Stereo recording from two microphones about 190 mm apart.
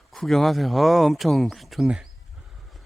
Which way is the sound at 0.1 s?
Centre (ahead or behind).